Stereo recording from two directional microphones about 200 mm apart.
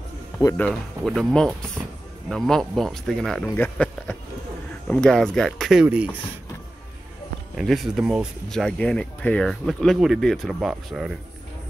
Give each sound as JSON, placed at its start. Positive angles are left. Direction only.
{"t": 0.4, "sound": "speech", "side_deg": 15}
{"t": 0.7, "sound": "speech", "side_deg": 0}
{"t": 7.5, "sound": "speech", "side_deg": 0}